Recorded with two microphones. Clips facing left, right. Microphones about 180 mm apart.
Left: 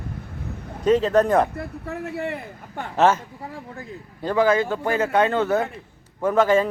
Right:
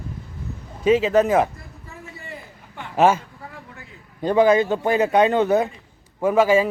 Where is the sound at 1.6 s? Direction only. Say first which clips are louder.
Left 11 dB; 65° left (ahead or behind).